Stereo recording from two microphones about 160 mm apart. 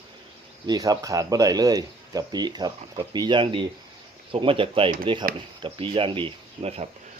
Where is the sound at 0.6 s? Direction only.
25° right (ahead or behind); by 6.9 s 40° right (ahead or behind).